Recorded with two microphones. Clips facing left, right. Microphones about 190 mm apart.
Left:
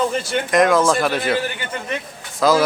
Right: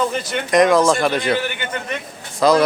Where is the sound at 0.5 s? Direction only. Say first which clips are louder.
Right 2 dB; centre (ahead or behind).